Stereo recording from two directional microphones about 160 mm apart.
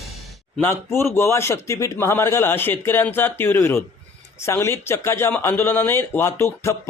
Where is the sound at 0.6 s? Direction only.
15° left (ahead or behind).